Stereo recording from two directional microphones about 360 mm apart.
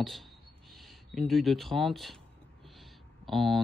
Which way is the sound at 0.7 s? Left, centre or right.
Centre.